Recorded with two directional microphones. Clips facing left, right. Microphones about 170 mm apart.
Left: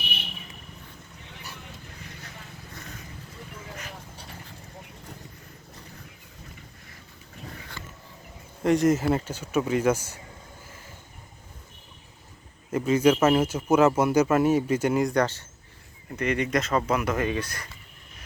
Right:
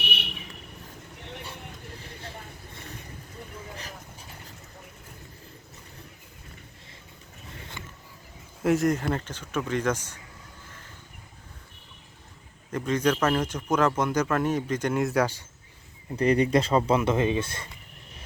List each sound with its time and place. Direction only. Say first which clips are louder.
0.0 s vehicle: right 3 dB; 70° right (ahead or behind)
2.0 s vehicle: right 2 dB; 30° right (ahead or behind)
8.6 s speech: left 2 dB; centre (ahead or behind)
12.7 s speech: left 4 dB; 5° left (ahead or behind)
15.0 s speech: left 1 dB; 5° right (ahead or behind)
16.1 s speech: right 4 dB; 35° right (ahead or behind)